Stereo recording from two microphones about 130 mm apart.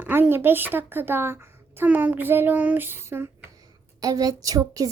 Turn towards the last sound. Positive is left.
turn(degrees=-25)  # may be behind; listen again after turning